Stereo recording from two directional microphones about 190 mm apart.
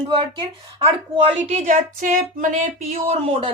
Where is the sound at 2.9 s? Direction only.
30° right (ahead or behind).